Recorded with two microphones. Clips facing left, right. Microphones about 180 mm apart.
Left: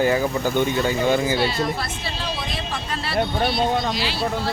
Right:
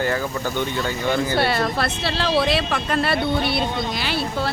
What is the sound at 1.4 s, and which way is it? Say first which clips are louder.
Speech: right 2 dB; 65° right (ahead or behind).